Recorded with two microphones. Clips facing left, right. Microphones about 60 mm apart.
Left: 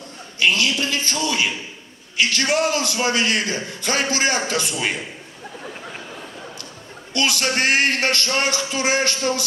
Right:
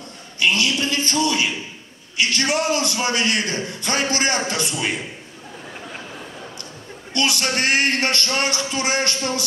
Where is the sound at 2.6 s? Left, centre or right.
Right.